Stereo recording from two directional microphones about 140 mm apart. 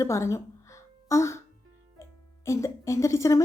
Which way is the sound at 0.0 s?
20° left (ahead or behind).